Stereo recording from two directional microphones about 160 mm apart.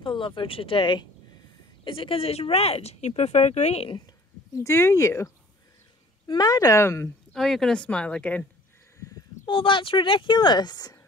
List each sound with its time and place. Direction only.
0.0 s speech: 30° left (ahead or behind)
4.6 s speech: 15° left (ahead or behind)
7.3 s speech: centre (ahead or behind)
9.5 s speech: 30° left (ahead or behind)